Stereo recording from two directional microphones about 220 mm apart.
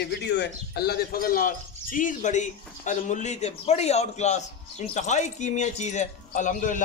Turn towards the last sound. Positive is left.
turn(degrees=35)  # may be behind; listen again after turning